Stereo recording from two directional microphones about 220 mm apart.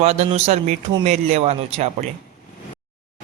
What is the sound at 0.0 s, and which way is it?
Speech, 30° right (ahead or behind).